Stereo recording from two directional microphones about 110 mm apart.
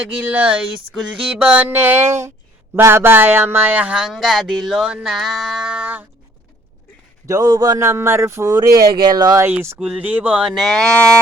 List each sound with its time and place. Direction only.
0.2 s speech: 15° right (ahead or behind)
7.3 s speech: 30° right (ahead or behind)
9.4 s speech: 20° right (ahead or behind)
9.7 s speech: 10° right (ahead or behind)
10.9 s music: 10° left (ahead or behind)